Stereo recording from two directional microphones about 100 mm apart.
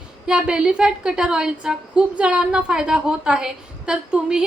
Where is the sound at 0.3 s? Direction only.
10° right (ahead or behind).